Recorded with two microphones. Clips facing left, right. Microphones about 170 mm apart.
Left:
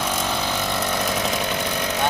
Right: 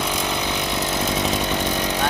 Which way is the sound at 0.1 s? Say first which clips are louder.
Even; 15° right (ahead or behind).